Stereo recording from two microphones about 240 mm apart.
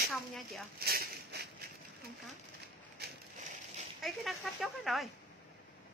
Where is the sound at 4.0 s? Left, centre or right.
Centre.